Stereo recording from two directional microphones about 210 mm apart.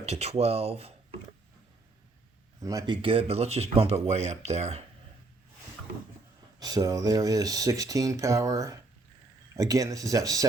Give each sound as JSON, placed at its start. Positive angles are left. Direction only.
{"t": 0.0, "sound": "speech", "side_deg": -30}
{"t": 2.6, "sound": "speech", "side_deg": -20}
{"t": 6.6, "sound": "speech", "side_deg": -20}